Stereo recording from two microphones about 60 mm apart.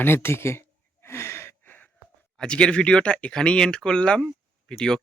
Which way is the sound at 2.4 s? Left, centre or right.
Centre.